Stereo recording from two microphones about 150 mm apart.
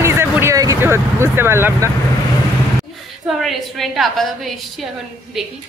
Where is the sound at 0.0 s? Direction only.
15° right (ahead or behind).